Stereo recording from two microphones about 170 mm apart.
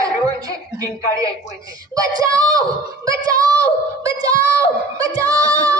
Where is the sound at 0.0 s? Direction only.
20° right (ahead or behind).